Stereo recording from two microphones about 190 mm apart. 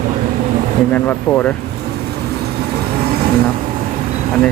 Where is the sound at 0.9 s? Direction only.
10° left (ahead or behind).